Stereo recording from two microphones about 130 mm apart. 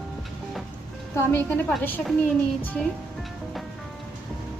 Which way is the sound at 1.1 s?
15° left (ahead or behind).